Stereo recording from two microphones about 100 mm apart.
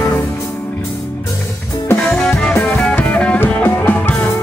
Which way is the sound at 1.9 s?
15° left (ahead or behind).